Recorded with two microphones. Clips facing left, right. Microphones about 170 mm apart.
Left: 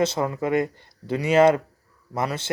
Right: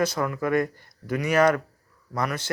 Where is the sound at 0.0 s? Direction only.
25° left (ahead or behind).